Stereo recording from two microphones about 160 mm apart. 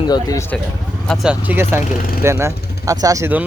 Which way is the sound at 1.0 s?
Centre (ahead or behind).